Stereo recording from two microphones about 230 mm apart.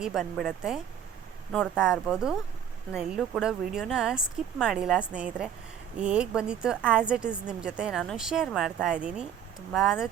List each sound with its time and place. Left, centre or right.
0.0 s speech: centre